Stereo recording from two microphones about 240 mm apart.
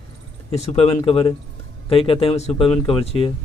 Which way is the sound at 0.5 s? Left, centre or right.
Left.